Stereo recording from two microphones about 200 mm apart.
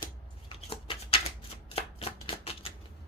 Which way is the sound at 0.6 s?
25° left (ahead or behind).